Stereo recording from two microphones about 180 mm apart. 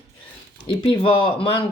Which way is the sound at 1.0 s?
30° left (ahead or behind).